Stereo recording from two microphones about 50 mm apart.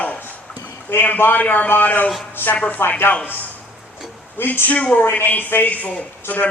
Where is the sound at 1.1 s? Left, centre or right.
Left.